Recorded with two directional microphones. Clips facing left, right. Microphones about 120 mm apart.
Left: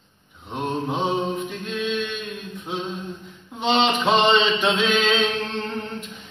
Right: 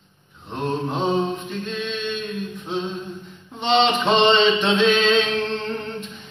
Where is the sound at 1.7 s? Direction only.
10° left (ahead or behind).